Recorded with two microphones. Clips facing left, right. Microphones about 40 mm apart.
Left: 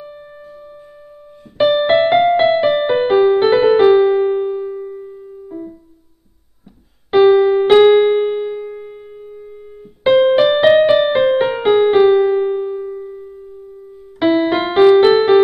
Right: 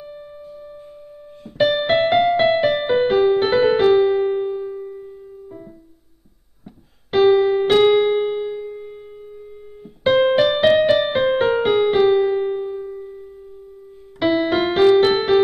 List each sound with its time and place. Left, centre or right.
1.6 s music: centre
7.2 s keyboard: centre
7.6 s music: centre